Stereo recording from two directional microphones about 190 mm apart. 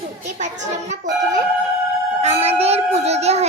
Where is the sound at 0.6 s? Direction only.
40° right (ahead or behind).